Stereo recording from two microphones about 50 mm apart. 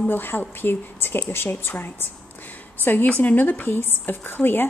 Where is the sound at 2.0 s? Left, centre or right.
Left.